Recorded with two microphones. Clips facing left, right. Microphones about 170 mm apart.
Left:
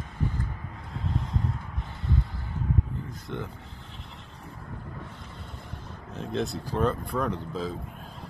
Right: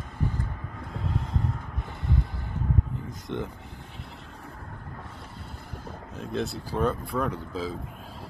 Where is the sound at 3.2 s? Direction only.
20° right (ahead or behind).